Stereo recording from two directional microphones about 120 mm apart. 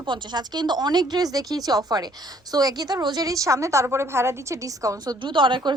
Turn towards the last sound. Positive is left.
turn(degrees=-40)  # may be behind; listen again after turning